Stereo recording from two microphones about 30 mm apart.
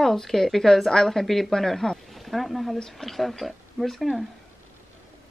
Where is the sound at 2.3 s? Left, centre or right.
Centre.